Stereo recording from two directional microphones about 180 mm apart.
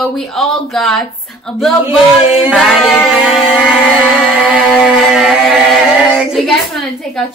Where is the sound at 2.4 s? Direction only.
Centre (ahead or behind).